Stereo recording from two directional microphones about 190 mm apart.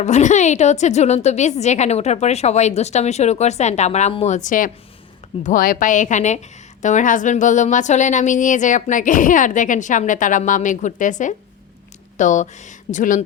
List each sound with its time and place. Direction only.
0.0 s a woman's voice: 40° left (ahead or behind)